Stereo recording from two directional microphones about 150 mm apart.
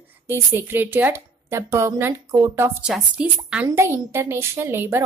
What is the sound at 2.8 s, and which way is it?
Speech, 5° right (ahead or behind).